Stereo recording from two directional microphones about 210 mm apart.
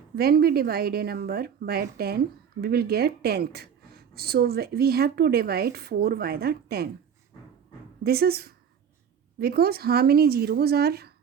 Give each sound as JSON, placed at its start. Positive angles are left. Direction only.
{"t": 0.2, "sound": "a woman's voice", "side_deg": -50}
{"t": 8.0, "sound": "a woman's voice", "side_deg": -50}